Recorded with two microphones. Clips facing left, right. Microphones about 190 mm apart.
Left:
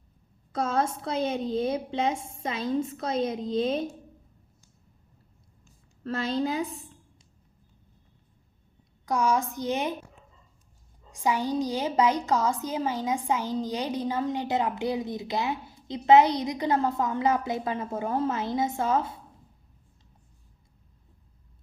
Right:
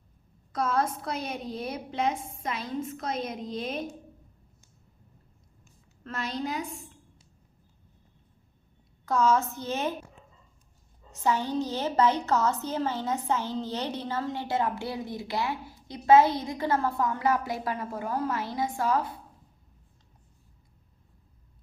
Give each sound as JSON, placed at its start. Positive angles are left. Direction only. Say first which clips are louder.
{"t": 0.5, "sound": "a woman's voice", "louder": "left 1 dB", "side_deg": 25}
{"t": 6.1, "sound": "a woman's voice", "louder": "left 5 dB", "side_deg": 30}
{"t": 9.0, "sound": "a woman's voice", "louder": "right 1 dB", "side_deg": 15}
{"t": 11.1, "sound": "a woman's voice", "louder": "left 1 dB", "side_deg": 10}